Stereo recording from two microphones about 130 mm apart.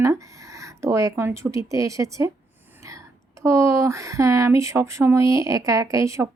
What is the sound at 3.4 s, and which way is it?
Speech, 25° right (ahead or behind).